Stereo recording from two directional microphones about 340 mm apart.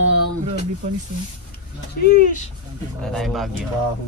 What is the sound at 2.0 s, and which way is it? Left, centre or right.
Speech, left.